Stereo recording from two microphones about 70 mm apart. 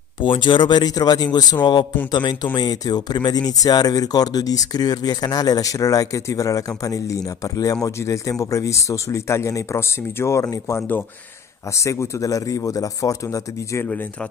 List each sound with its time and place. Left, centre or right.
0.4 s speech: left